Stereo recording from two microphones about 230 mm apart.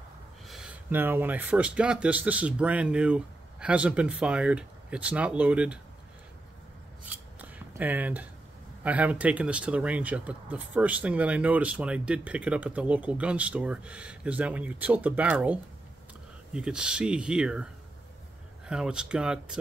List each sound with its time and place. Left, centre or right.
0.5 s speech: centre
7.3 s a sound: centre
8.8 s speech: centre
16.5 s speech: centre
18.7 s speech: centre